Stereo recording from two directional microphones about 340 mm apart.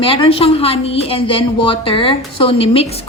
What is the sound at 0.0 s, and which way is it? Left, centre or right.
A woman's voice, centre.